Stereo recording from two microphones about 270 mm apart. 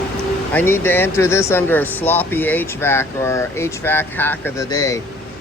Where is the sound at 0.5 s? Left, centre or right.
Centre.